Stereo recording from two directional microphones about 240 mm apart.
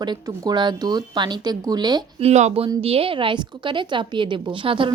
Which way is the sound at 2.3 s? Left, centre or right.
Right.